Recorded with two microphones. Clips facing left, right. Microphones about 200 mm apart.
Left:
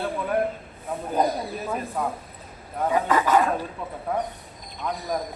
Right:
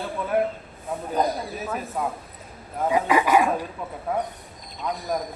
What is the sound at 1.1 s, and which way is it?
Speech, 5° right (ahead or behind).